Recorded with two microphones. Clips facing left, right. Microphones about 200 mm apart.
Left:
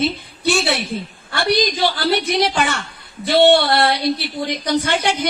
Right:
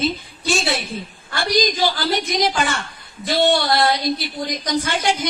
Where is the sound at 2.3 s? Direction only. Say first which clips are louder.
Left 2 dB; 65° left (ahead or behind).